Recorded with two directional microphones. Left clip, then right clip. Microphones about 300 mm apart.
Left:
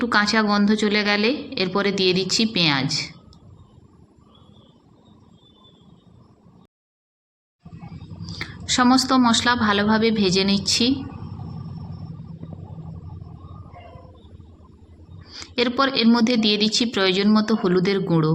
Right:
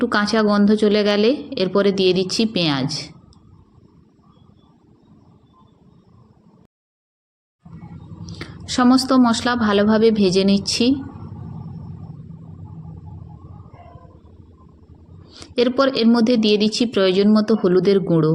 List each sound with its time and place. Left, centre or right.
0.0 s a woman's voice: centre
8.4 s a woman's voice: centre
15.3 s a woman's voice: centre